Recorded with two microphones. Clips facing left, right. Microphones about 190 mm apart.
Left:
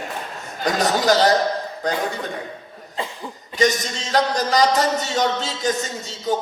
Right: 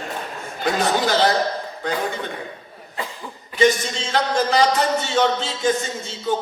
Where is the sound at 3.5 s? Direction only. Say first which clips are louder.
Right 2 dB; 40° left (ahead or behind).